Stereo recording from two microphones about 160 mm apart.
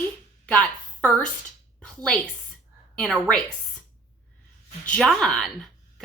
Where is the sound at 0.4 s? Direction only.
5° left (ahead or behind).